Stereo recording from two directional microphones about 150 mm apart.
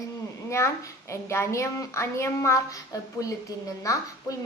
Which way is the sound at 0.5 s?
20° left (ahead or behind).